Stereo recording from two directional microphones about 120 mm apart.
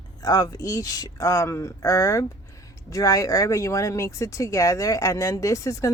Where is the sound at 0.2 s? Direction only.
30° left (ahead or behind).